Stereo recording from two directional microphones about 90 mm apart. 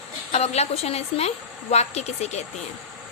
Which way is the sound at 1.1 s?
90° left.